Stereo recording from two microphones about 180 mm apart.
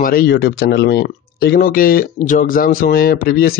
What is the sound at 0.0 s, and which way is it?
Speech, 55° left (ahead or behind).